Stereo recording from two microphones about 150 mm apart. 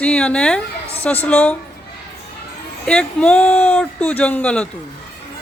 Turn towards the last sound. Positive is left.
turn(degrees=10)  # may be behind; listen again after turning